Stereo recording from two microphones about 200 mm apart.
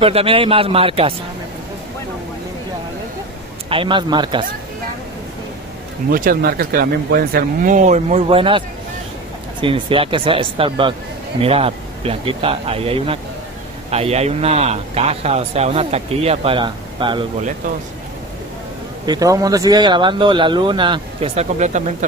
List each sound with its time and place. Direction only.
0.0 s speech: 30° right (ahead or behind)
3.6 s speech: 25° right (ahead or behind)
6.0 s speech: 45° right (ahead or behind); by 17.3 s 25° right (ahead or behind)
19.0 s speech: 15° right (ahead or behind); by 21.8 s 35° right (ahead or behind)